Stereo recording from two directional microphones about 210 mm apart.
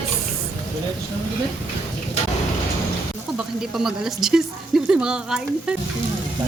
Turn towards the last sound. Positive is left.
turn(degrees=-5)  # may be behind; listen again after turning